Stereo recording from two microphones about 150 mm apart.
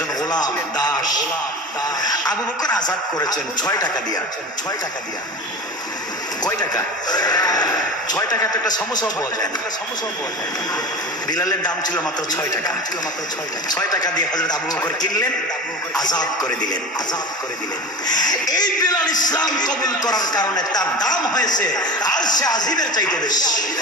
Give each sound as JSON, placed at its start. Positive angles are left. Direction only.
{"t": 0.3, "sound": "music", "side_deg": 25}
{"t": 2.0, "sound": "radio", "side_deg": 25}
{"t": 3.2, "sound": "a man's voice", "side_deg": 25}
{"t": 6.4, "sound": "a man's voice", "side_deg": 25}
{"t": 11.2, "sound": "a man's voice", "side_deg": 25}
{"t": 13.7, "sound": "a man's voice", "side_deg": 25}
{"t": 18.0, "sound": "a man's voice", "side_deg": 25}